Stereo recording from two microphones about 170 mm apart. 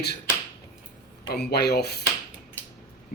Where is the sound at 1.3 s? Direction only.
75° left (ahead or behind).